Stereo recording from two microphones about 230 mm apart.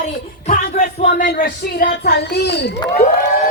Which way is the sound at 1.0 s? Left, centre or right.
Left.